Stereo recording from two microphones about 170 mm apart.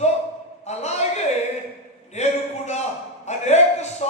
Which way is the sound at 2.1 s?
40° left (ahead or behind).